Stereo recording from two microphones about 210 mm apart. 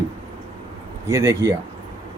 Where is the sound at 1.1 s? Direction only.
15° right (ahead or behind).